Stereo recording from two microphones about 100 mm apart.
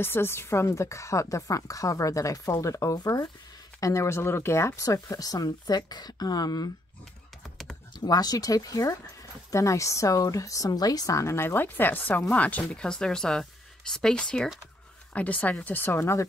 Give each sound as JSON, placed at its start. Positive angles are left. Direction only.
{"t": 0.0, "sound": "a woman's voice", "side_deg": 25}
{"t": 8.0, "sound": "a woman's voice", "side_deg": 40}